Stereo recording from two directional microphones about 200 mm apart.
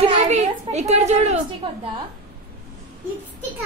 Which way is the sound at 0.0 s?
30° right (ahead or behind).